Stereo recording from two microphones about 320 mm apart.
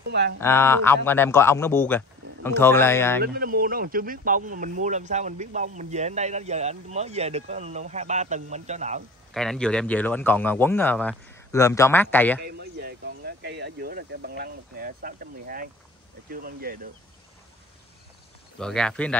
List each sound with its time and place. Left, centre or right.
0.1 s speech: right
0.4 s a man's voice: centre
3.2 s speech: right
9.3 s a man's voice: centre
12.4 s speech: right
18.6 s a man's voice: centre